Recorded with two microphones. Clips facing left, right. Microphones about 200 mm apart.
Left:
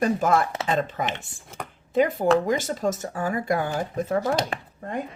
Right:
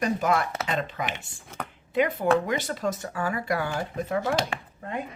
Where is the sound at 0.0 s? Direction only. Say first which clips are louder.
Left 3 dB; 50° left (ahead or behind).